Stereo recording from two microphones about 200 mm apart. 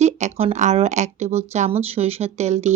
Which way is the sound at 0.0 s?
35° right (ahead or behind).